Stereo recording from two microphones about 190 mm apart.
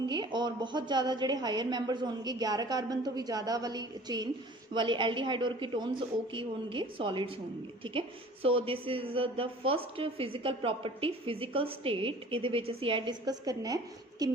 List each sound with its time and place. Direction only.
0.1 s a woman's voice: 25° right (ahead or behind)